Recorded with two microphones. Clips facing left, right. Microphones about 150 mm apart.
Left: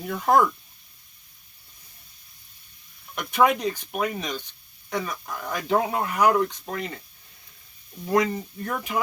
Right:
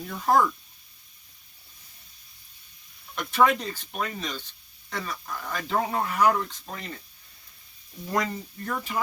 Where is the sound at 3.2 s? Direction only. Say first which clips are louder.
Left 1 dB; 15° left (ahead or behind).